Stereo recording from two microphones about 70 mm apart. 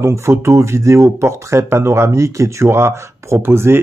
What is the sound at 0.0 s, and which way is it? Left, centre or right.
Speech, right.